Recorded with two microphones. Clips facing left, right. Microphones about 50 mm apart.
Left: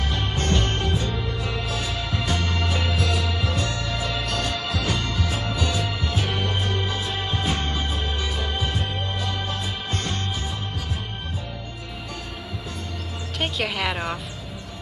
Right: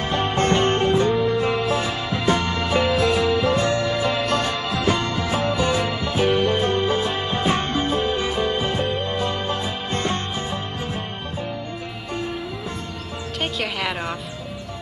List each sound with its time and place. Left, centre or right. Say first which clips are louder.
0.0 s music: right 6 dB; right
13.4 s music: even; centre